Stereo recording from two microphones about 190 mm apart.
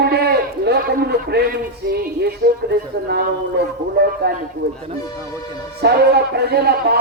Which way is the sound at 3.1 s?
60° right (ahead or behind).